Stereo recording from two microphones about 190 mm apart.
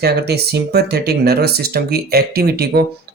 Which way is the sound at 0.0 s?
60° right (ahead or behind).